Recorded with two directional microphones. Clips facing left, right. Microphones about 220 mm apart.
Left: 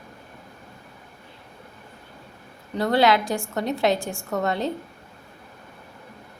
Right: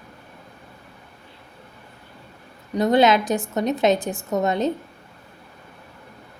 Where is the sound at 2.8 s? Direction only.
20° right (ahead or behind).